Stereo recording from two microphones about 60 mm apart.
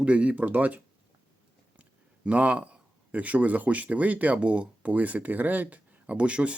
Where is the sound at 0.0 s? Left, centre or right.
Right.